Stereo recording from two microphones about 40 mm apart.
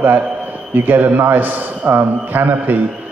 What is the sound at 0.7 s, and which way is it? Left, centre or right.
A man's voice, right.